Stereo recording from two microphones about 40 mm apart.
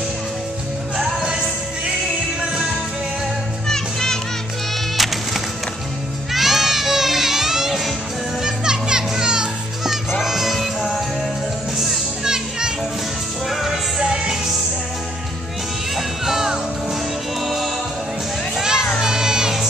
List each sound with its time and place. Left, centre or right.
0.9 s music: centre
3.6 s music: centre
4.9 s music: centre; by 9.5 s right
10.2 s music: centre
12.3 s children playing: centre
13.5 s music: centre
16.3 s music: centre
18.6 s music: centre
18.9 s crowd: centre